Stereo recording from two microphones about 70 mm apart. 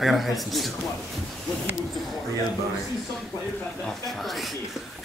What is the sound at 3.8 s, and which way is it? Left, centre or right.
Speech, centre.